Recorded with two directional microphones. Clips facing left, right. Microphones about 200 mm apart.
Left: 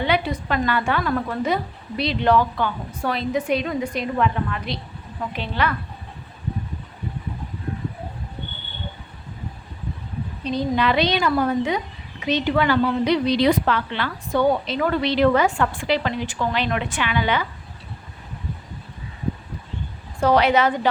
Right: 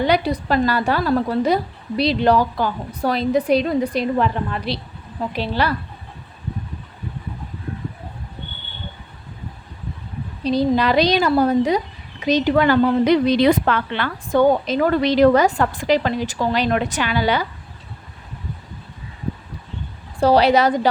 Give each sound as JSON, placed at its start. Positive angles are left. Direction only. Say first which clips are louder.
{"t": 0.0, "sound": "a woman's voice", "louder": "right 4 dB", "side_deg": -40}
{"t": 10.4, "sound": "a woman's voice", "louder": "right 4 dB", "side_deg": -35}
{"t": 20.1, "sound": "a woman's voice", "louder": "right 3 dB", "side_deg": -35}